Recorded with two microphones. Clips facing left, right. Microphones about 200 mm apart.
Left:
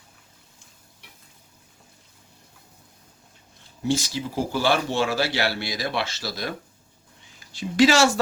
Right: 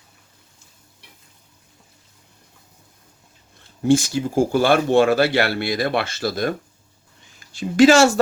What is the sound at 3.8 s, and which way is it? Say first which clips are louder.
Speech: right 8 dB; 50° right (ahead or behind).